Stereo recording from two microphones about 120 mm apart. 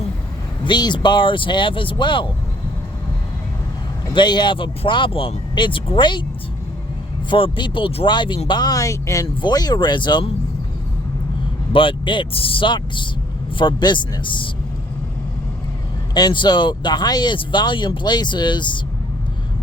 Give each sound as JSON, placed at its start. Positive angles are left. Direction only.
{"t": 0.6, "sound": "speech", "side_deg": 40}
{"t": 4.1, "sound": "speech", "side_deg": 40}
{"t": 7.3, "sound": "speech", "side_deg": 45}
{"t": 11.7, "sound": "speech", "side_deg": 45}
{"t": 16.1, "sound": "speech", "side_deg": 35}